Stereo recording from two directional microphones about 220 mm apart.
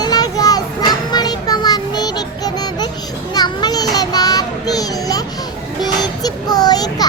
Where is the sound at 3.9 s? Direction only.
15° left (ahead or behind).